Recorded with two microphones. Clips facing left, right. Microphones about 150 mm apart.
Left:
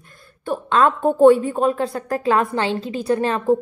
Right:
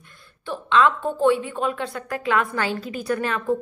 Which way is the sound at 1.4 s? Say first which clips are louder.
Left 6 dB; 35° left (ahead or behind).